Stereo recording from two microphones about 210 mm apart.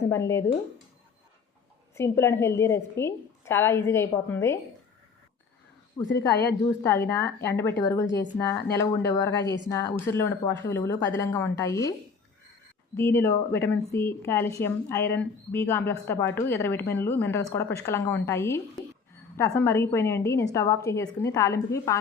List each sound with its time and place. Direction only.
0.0 s speech: 10° left (ahead or behind)
2.0 s speech: 10° left (ahead or behind)
6.1 s a woman's voice: 50° left (ahead or behind)
6.7 s speech: 10° left (ahead or behind)
13.0 s speech: 10° left (ahead or behind)